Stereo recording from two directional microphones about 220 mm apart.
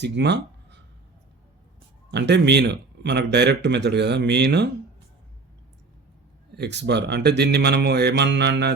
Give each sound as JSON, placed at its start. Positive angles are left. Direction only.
{"t": 0.0, "sound": "speech", "side_deg": -50}
{"t": 2.0, "sound": "speech", "side_deg": -50}
{"t": 6.6, "sound": "speech", "side_deg": -50}